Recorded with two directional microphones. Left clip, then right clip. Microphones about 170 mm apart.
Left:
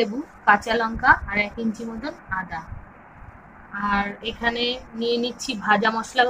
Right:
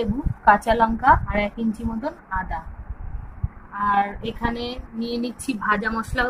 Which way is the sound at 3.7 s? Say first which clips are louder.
Right 3 dB; 60° right (ahead or behind).